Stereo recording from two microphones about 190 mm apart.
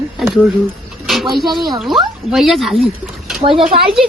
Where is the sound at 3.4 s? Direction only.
25° right (ahead or behind).